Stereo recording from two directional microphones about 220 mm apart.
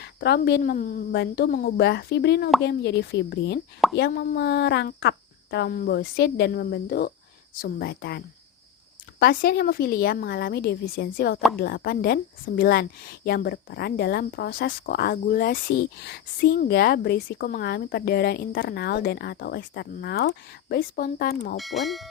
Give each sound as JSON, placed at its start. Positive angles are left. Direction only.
{"t": 0.0, "sound": "a woman's voice", "side_deg": 50}
{"t": 21.6, "sound": "speech", "side_deg": 0}